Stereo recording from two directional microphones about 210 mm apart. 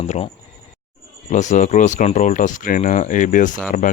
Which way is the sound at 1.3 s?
35° left (ahead or behind).